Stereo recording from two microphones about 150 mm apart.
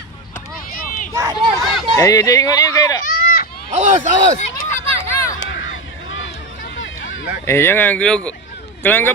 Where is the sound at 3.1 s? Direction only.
60° left (ahead or behind).